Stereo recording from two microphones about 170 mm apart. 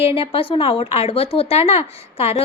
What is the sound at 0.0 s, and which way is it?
A woman's voice, 35° left (ahead or behind).